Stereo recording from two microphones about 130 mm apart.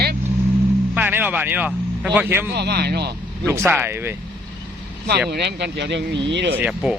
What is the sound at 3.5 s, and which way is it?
Speech, 15° right (ahead or behind).